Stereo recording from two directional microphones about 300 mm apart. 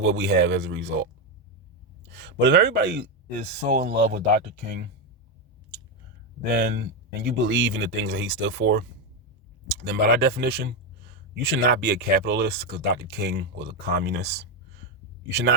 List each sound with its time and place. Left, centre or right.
0.0 s speech: right
2.0 s speech: right
6.6 s speech: right